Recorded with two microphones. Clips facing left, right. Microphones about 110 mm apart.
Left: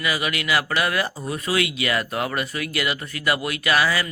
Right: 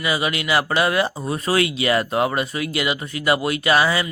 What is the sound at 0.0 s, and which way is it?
Speech, 25° right (ahead or behind).